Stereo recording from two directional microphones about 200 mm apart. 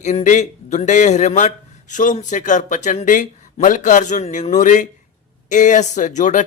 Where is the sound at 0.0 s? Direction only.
35° left (ahead or behind).